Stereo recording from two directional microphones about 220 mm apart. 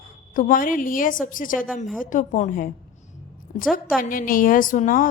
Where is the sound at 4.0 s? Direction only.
40° left (ahead or behind).